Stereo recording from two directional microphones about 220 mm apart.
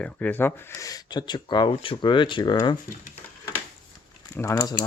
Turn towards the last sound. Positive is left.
turn(degrees=15)  # may be behind; listen again after turning